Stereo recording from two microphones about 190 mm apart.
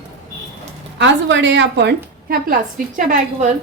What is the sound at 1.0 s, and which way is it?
A woman's voice, 70° right (ahead or behind).